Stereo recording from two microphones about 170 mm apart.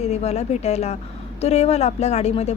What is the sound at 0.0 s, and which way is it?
Speech, 40° left (ahead or behind).